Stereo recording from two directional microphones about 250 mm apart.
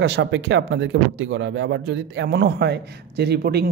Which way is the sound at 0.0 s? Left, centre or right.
Right.